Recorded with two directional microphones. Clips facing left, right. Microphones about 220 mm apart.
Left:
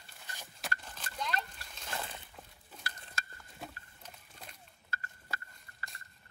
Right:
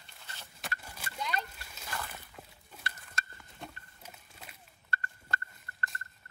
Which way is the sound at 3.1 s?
5° left (ahead or behind).